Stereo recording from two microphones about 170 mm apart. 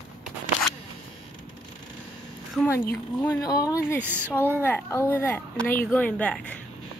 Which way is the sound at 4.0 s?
10° right (ahead or behind).